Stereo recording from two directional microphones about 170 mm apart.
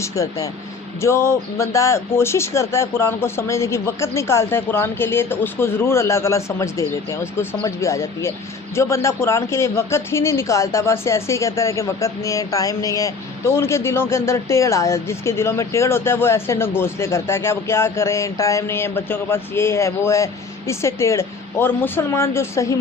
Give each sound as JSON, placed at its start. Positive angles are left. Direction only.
{"t": 0.0, "sound": "speech", "side_deg": 20}